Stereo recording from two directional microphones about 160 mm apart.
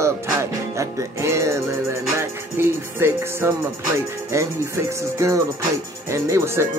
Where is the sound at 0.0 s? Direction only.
20° right (ahead or behind).